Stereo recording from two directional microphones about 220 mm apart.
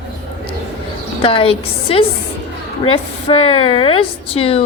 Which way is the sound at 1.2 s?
25° left (ahead or behind).